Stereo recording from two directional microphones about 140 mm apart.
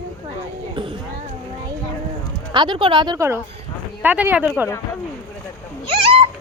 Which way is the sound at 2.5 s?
35° right (ahead or behind).